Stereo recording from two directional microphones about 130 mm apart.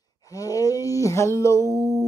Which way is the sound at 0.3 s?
25° left (ahead or behind).